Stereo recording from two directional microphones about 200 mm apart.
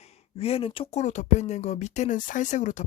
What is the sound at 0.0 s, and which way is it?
Speech, 30° left (ahead or behind).